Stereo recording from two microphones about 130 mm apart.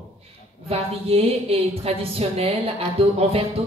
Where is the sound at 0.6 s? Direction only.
50° right (ahead or behind).